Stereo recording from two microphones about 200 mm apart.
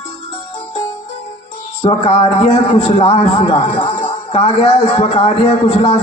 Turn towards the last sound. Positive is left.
turn(degrees=30)  # may be behind; listen again after turning